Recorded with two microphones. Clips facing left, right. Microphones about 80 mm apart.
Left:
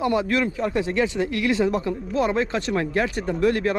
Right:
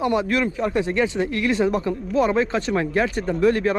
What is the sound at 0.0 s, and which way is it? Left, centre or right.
Speech, right.